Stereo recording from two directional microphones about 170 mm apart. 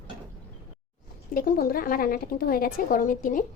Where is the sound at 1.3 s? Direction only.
55° left (ahead or behind).